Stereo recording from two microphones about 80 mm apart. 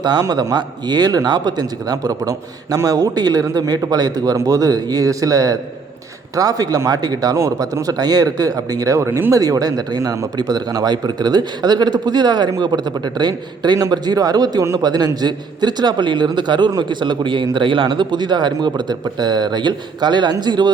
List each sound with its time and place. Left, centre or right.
0.0 s a man's voice: right
9.0 s speech: right
9.3 s a man's voice: right
13.7 s a man's voice: right